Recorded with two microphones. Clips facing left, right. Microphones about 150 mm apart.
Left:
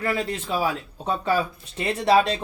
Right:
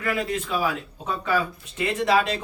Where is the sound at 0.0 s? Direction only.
30° left (ahead or behind).